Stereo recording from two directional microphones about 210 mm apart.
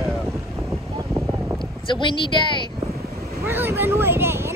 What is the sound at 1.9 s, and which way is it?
Speech, 25° left (ahead or behind).